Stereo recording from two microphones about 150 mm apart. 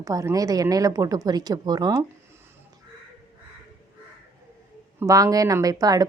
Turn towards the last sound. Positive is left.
turn(degrees=-25)  # may be behind; listen again after turning